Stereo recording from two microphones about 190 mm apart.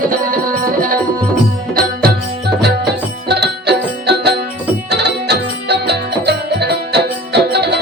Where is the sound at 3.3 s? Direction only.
60° right (ahead or behind).